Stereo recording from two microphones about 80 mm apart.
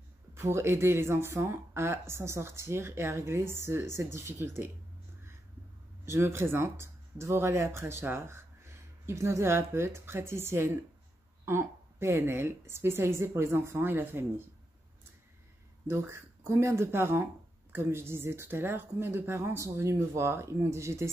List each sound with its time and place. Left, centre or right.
0.3 s speech: right
6.0 s speech: right
15.9 s speech: right